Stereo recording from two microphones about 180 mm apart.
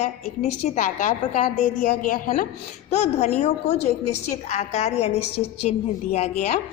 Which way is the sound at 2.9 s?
40° left (ahead or behind).